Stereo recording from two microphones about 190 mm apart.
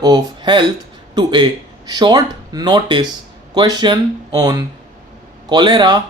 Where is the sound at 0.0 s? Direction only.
20° right (ahead or behind).